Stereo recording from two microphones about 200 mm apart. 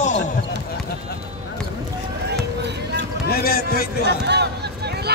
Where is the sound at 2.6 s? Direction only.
55° right (ahead or behind).